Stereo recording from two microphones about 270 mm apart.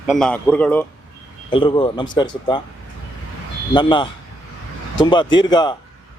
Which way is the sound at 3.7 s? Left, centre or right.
Centre.